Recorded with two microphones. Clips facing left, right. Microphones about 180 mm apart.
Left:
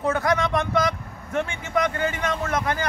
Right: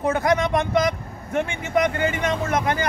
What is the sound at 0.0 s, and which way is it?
Speech, 15° right (ahead or behind).